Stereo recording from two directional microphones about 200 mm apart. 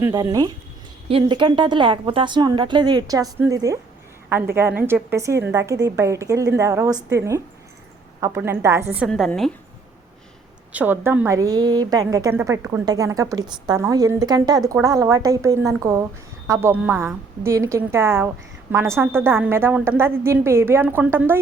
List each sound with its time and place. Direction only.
0.0 s a woman's voice: 20° right (ahead or behind); by 9.5 s centre (ahead or behind)
10.7 s a woman's voice: 10° right (ahead or behind)